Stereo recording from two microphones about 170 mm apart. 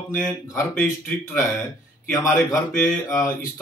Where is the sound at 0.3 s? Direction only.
15° left (ahead or behind).